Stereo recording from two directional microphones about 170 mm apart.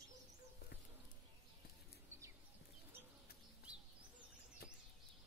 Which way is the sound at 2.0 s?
15° right (ahead or behind).